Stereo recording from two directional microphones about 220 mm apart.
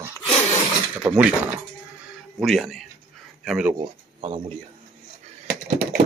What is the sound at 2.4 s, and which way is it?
Speech, centre (ahead or behind).